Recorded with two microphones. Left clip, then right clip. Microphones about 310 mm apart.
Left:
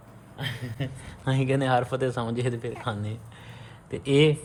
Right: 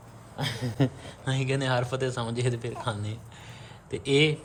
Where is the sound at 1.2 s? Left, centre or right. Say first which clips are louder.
Left 3 dB; centre.